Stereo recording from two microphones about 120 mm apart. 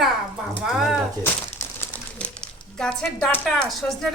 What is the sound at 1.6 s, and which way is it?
Crumpling, 20° left (ahead or behind).